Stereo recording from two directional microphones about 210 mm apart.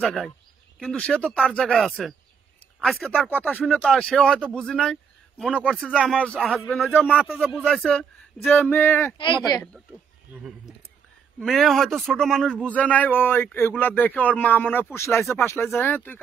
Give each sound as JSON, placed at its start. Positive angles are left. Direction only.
{"t": 0.0, "sound": "a man's voice", "side_deg": 0}
{"t": 11.3, "sound": "a man's voice", "side_deg": 0}